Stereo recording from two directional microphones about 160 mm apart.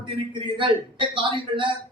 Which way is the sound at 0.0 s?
30° right (ahead or behind).